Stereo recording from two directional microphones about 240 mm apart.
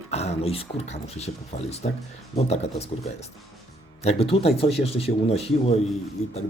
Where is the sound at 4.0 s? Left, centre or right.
Left.